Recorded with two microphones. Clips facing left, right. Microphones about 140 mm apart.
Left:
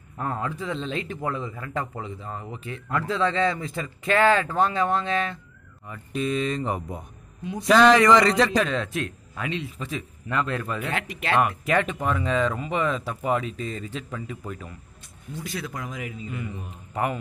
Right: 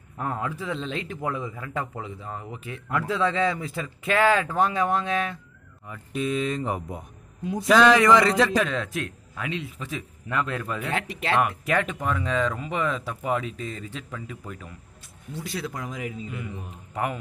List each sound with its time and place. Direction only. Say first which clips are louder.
0.2 s a man's voice: left 1 dB; 5° right (ahead or behind)
10.9 s speech: right 2 dB; 30° right (ahead or behind)
11.3 s a man's voice: left 2 dB; centre (ahead or behind)
15.4 s speech: right 1 dB; 30° right (ahead or behind)
16.3 s a man's voice: left 1 dB; 5° right (ahead or behind)